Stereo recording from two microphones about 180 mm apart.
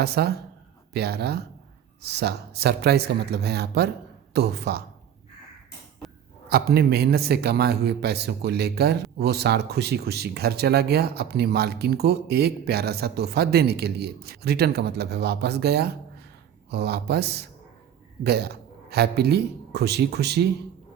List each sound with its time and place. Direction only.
0.0 s a man's voice: 65° right (ahead or behind)
6.5 s a man's voice: 60° right (ahead or behind)